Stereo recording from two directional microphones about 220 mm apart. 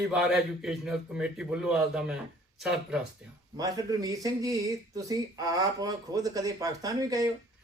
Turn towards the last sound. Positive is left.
turn(degrees=-15)  # may be behind; listen again after turning